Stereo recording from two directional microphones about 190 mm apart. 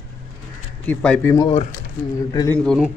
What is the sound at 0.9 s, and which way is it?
Speech, 5° left (ahead or behind).